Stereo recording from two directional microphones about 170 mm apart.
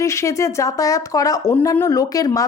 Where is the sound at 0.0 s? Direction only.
15° left (ahead or behind).